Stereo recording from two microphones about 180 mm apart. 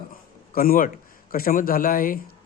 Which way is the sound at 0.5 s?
55° left (ahead or behind).